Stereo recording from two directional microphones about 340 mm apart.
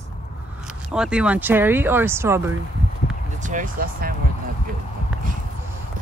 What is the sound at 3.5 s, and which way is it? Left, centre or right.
Speech, right.